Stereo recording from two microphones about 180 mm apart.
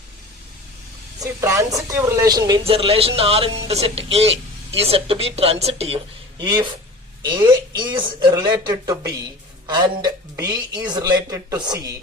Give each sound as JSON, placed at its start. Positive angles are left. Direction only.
{"t": 1.2, "sound": "speech", "side_deg": -20}
{"t": 6.4, "sound": "a woman's voice", "side_deg": -25}